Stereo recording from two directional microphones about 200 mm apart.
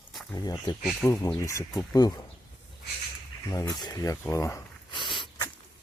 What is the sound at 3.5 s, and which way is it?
Speech, 20° left (ahead or behind).